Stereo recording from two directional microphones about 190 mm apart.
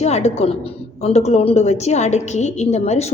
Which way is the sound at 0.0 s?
35° left (ahead or behind).